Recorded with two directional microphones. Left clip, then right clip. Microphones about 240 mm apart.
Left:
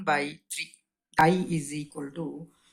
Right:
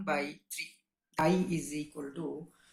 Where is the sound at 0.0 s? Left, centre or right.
Left.